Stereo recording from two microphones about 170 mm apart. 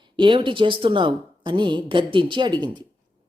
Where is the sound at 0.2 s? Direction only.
30° right (ahead or behind).